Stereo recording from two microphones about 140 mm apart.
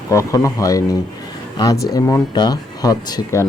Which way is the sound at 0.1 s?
20° left (ahead or behind).